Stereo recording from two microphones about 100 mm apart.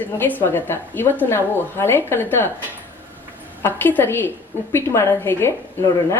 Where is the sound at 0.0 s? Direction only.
20° left (ahead or behind).